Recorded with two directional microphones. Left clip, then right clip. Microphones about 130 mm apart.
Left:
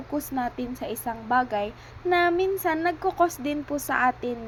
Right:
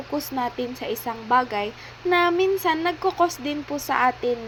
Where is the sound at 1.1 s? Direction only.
35° left (ahead or behind).